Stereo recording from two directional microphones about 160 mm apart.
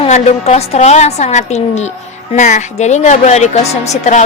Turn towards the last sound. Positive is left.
turn(degrees=45)  # may be behind; listen again after turning